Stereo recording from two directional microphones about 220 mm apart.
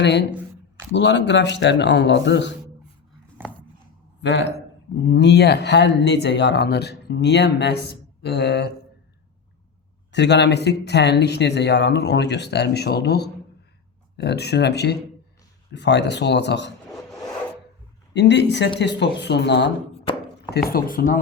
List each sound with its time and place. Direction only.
0.0 s speech: 50° left (ahead or behind)
3.4 s biting: 10° right (ahead or behind)
4.2 s speech: 55° left (ahead or behind)
10.1 s speech: 50° left (ahead or behind)
18.1 s speech: 50° left (ahead or behind)